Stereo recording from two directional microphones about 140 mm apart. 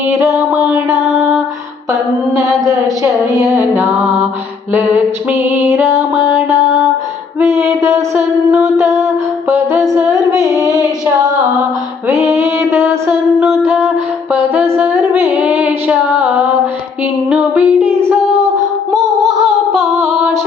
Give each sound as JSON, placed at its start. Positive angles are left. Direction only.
{"t": 0.1, "sound": "music", "side_deg": -20}
{"t": 0.6, "sound": "music", "side_deg": -5}
{"t": 1.9, "sound": "music", "side_deg": -25}
{"t": 7.3, "sound": "mantra", "side_deg": -20}
{"t": 8.7, "sound": "a sound", "side_deg": -20}
{"t": 10.5, "sound": "a sound", "side_deg": 25}
{"t": 11.0, "sound": "female singing", "side_deg": -25}
{"t": 12.2, "sound": "music", "side_deg": -15}
{"t": 14.3, "sound": "a sound", "side_deg": -10}
{"t": 17.2, "sound": "female singing", "side_deg": -5}
{"t": 18.9, "sound": "music", "side_deg": 0}
{"t": 20.1, "sound": "female singing", "side_deg": -10}